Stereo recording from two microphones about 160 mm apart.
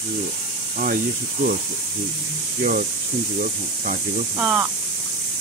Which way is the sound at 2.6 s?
60° right (ahead or behind).